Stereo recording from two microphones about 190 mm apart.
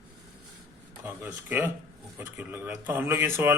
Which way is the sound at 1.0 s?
10° right (ahead or behind).